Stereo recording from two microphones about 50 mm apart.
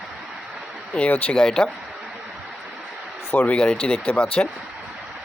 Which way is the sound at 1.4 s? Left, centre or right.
Centre.